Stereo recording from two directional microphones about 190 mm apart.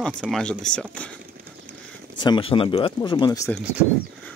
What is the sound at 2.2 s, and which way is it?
Speech, 25° left (ahead or behind).